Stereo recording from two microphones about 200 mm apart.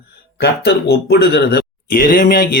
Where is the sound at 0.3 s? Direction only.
50° left (ahead or behind).